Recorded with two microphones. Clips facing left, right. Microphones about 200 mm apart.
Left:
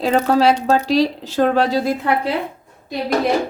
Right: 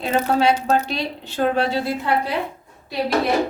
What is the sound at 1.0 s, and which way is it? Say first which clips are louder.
Speech: left 8 dB; 90° left.